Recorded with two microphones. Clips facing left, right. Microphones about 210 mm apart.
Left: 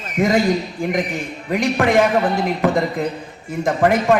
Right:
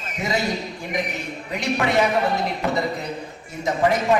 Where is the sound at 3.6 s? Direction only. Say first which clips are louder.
Left 4 dB; 55° left (ahead or behind).